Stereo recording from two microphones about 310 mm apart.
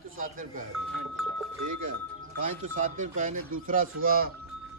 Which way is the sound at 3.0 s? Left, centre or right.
Right.